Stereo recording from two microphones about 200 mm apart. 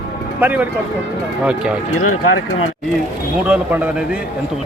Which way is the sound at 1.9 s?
90° left.